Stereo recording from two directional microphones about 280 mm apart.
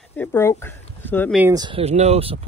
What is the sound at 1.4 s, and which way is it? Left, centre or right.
Speech, centre.